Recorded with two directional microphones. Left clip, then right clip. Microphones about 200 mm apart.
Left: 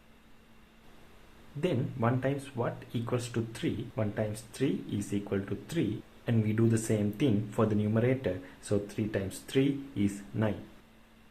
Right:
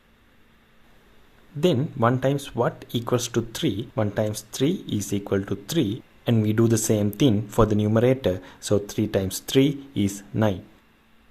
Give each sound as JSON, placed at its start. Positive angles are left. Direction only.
{"t": 1.6, "sound": "speech", "side_deg": -50}